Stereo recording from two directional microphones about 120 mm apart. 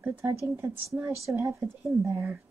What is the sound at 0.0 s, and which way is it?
Speech, 20° right (ahead or behind).